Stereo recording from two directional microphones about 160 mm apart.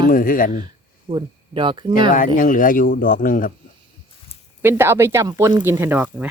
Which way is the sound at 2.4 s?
60° left (ahead or behind).